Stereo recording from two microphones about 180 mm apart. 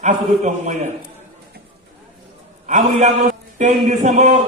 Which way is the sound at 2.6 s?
40° right (ahead or behind).